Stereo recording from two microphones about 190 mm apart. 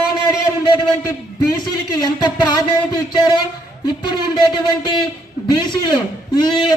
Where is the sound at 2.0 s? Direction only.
20° left (ahead or behind).